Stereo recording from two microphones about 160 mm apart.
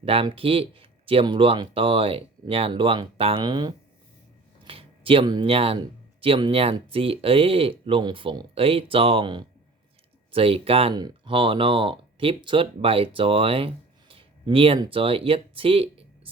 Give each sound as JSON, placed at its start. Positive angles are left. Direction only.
{"t": 0.0, "sound": "speech", "side_deg": -35}
{"t": 14.1, "sound": "a sound", "side_deg": -35}
{"t": 14.8, "sound": "speech", "side_deg": -35}